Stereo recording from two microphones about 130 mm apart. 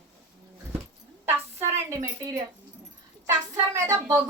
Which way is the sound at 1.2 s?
20° right (ahead or behind).